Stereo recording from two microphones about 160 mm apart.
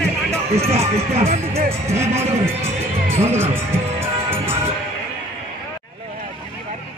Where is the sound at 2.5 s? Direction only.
15° right (ahead or behind).